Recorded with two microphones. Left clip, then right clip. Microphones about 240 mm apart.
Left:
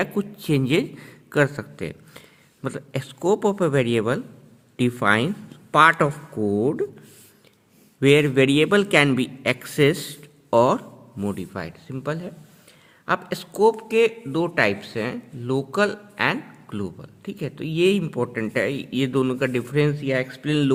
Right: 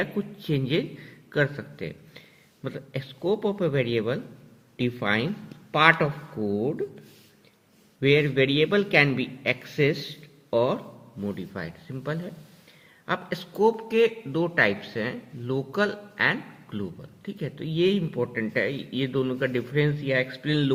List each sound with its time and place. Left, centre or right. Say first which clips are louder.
0.0 s a man's voice: left 4 dB; left
8.0 s a man's voice: left 4 dB; left